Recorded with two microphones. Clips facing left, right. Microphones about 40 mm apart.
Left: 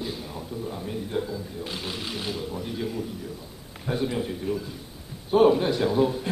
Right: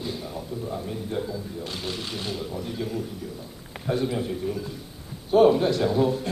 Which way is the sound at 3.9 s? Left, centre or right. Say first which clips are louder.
Right 1 dB; centre.